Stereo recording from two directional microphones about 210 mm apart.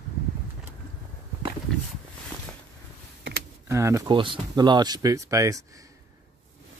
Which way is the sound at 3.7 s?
15° right (ahead or behind).